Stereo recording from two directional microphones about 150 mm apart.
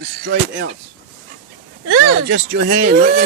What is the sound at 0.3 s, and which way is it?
Speech, 90° right.